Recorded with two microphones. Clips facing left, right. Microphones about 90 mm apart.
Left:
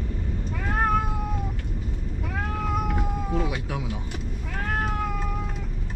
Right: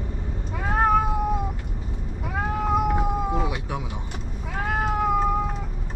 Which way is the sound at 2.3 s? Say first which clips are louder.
Right 5 dB; 15° right (ahead or behind).